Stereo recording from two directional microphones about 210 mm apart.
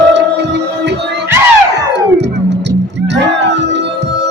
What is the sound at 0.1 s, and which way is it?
Music, 55° right (ahead or behind).